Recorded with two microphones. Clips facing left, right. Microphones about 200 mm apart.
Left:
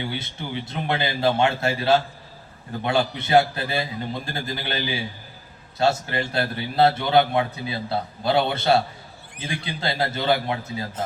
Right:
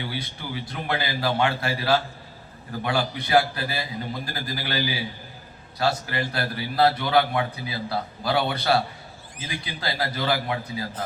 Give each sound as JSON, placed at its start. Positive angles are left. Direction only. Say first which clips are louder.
{"t": 0.0, "sound": "a man's voice", "louder": "left 2 dB", "side_deg": 25}
{"t": 9.8, "sound": "a man's voice", "louder": "left 3 dB", "side_deg": 25}